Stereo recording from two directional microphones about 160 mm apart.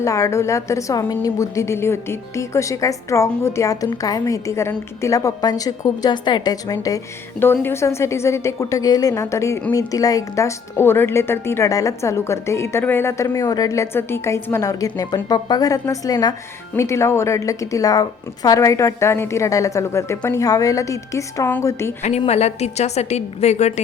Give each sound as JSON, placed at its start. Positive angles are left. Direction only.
{"t": 0.0, "sound": "a woman's voice", "side_deg": 20}
{"t": 22.3, "sound": "a woman's voice", "side_deg": 40}